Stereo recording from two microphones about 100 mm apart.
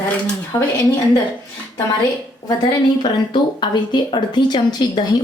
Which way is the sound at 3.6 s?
50° left (ahead or behind).